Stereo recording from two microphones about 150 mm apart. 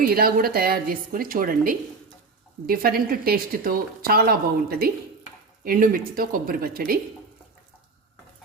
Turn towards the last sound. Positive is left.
turn(degrees=-75)  # may be behind; listen again after turning